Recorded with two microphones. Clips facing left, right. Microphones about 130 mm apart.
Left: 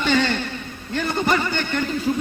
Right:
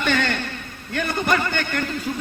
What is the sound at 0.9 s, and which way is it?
Speech, 20° left (ahead or behind).